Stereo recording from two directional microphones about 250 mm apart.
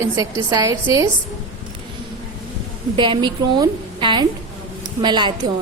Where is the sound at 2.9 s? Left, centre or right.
Centre.